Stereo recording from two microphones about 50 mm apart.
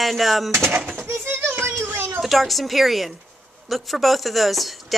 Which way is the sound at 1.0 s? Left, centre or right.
Right.